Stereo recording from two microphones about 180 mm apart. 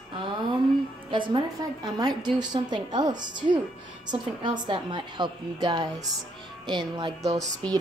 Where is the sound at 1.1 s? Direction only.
25° right (ahead or behind).